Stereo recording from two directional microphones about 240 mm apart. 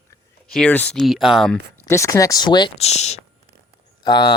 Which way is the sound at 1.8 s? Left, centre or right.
Centre.